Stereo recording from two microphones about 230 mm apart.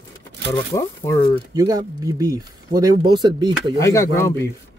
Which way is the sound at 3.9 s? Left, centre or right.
Centre.